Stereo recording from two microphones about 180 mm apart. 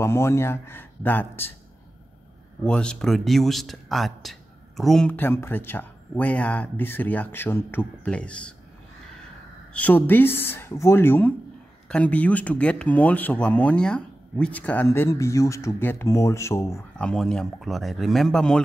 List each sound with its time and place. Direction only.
0.0 s speech: 15° left (ahead or behind)
2.6 s speech: 5° left (ahead or behind)
9.8 s speech: 10° left (ahead or behind)
17.1 s speech: 5° left (ahead or behind)